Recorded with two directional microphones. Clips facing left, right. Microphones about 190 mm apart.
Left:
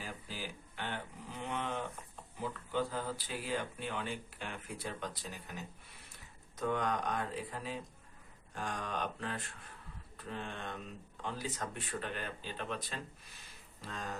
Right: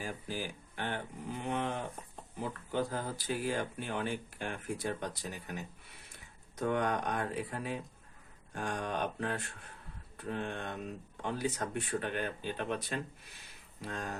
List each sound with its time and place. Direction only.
0.0 s a sound: 45° right (ahead or behind)
2.4 s speech: 50° right (ahead or behind)
6.6 s speech: 60° right (ahead or behind)